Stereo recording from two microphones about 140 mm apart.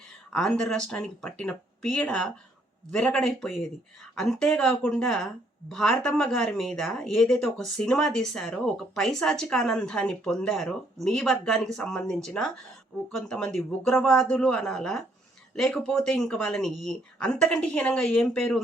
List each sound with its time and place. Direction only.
0.3 s speech: 5° left (ahead or behind)